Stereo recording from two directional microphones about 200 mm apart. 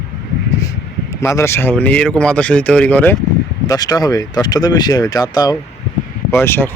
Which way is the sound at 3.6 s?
20° left (ahead or behind).